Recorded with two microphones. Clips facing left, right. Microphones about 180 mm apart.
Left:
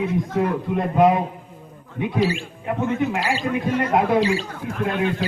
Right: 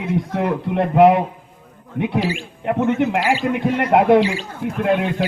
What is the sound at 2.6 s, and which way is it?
Speech, 70° right (ahead or behind).